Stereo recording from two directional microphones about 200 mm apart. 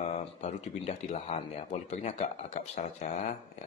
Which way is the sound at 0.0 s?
35° left (ahead or behind).